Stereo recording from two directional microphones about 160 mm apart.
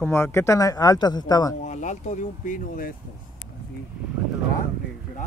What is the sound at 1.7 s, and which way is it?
Speech, 50° left (ahead or behind).